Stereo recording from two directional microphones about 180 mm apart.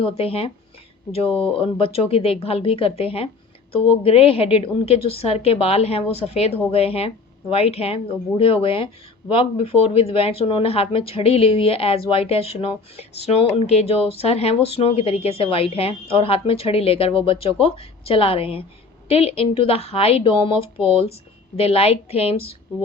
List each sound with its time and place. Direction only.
0.0 s speech: 35° left (ahead or behind)